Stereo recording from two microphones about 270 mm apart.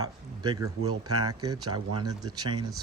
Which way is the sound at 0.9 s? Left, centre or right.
Right.